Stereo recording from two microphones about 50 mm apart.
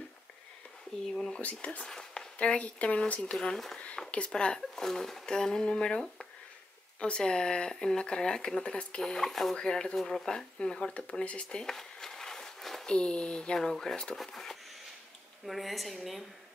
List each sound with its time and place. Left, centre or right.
1.4 s speech: left
1.9 s a sound: centre
2.3 s speech: left
3.3 s speech: centre
4.1 s speech: left
11.4 s a sound: centre
12.8 s a woman's voice: centre